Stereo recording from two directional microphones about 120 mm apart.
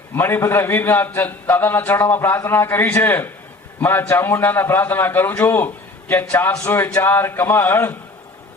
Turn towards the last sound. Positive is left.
turn(degrees=15)  # may be behind; listen again after turning